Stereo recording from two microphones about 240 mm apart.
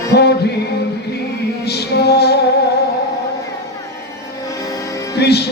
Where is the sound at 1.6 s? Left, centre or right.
Left.